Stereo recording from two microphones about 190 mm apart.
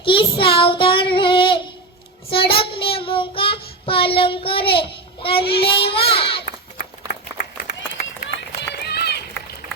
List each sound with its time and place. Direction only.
0.0 s child singing: 25° left (ahead or behind)
6.4 s run: 55° left (ahead or behind)